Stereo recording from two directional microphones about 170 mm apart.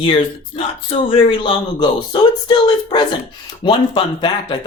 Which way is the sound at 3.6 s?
30° left (ahead or behind).